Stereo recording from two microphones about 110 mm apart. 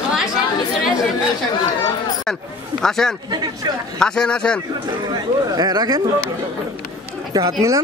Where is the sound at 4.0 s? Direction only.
5° left (ahead or behind).